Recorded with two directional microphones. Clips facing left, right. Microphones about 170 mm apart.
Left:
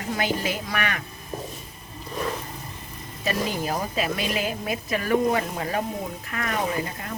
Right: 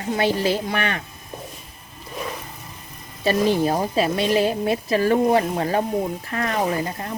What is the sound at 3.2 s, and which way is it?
A woman's voice, 30° right (ahead or behind).